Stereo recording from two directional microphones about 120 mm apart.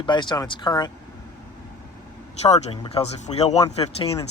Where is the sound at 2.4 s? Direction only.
60° left (ahead or behind).